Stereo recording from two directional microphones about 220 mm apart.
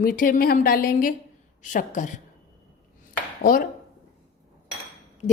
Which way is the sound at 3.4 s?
40° left (ahead or behind).